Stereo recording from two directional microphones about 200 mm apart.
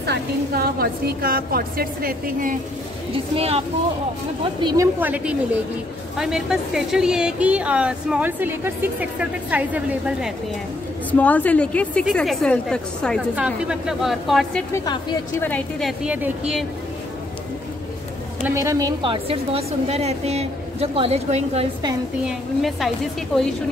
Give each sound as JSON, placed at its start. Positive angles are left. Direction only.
{"t": 0.0, "sound": "a woman's voice", "side_deg": -55}
{"t": 3.3, "sound": "a woman's voice", "side_deg": -30}
{"t": 5.0, "sound": "a woman's voice", "side_deg": -10}
{"t": 11.1, "sound": "speech", "side_deg": 10}
{"t": 14.9, "sound": "speech", "side_deg": 20}
{"t": 15.4, "sound": "a woman's voice", "side_deg": 5}
{"t": 16.0, "sound": "speech", "side_deg": -5}
{"t": 18.4, "sound": "a woman's voice", "side_deg": -15}
{"t": 22.2, "sound": "speech", "side_deg": 0}